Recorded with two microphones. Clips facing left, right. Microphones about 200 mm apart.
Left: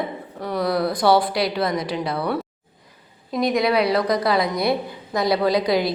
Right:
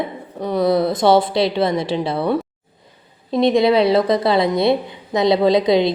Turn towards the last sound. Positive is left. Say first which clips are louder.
# right 5 dB
turn(degrees=-25)  # may be behind; listen again after turning